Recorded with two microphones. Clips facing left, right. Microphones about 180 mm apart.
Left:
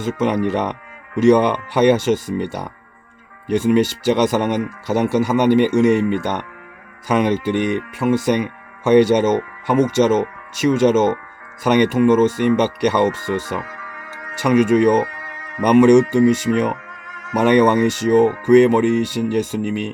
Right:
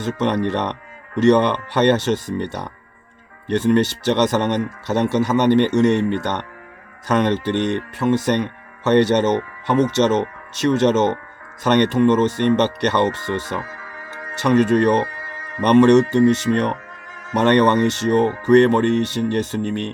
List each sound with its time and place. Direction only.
0.0 s speech: 10° left (ahead or behind)
13.6 s music: 30° right (ahead or behind)
14.4 s speech: 10° left (ahead or behind)